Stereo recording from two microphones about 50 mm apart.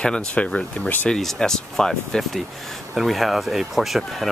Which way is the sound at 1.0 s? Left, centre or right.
Centre.